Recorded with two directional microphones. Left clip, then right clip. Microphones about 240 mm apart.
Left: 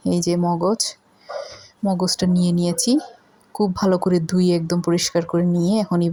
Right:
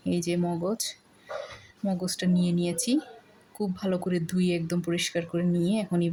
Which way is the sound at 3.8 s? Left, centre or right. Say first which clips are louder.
Left 10 dB; centre.